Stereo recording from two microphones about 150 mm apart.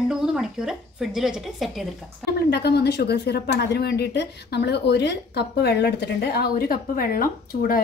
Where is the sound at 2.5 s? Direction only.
90° left.